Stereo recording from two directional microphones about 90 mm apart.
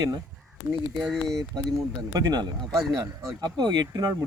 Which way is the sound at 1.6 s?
45° right (ahead or behind).